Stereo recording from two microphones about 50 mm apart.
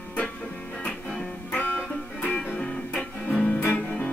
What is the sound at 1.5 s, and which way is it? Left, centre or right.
Music, left.